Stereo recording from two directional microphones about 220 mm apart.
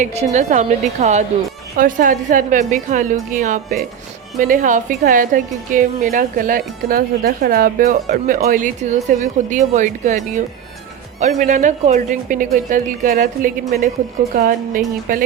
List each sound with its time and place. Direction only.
0.0 s a woman's voice: 30° right (ahead or behind)